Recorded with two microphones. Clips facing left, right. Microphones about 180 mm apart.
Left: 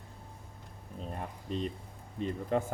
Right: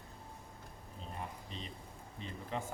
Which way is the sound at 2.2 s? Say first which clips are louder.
Left 11 dB; 50° left (ahead or behind).